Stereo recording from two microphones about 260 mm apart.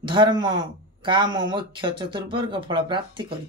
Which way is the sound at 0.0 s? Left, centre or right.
Centre.